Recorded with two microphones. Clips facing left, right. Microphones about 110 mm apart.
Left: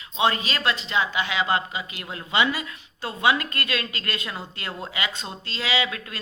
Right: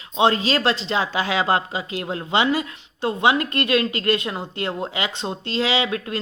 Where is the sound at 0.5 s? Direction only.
30° right (ahead or behind).